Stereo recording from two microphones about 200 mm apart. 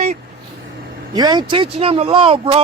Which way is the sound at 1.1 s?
20° right (ahead or behind).